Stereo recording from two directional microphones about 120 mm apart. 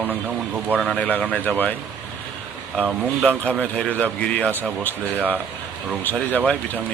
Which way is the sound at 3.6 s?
10° left (ahead or behind).